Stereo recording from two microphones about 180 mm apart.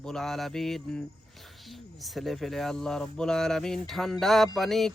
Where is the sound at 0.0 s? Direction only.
5° left (ahead or behind).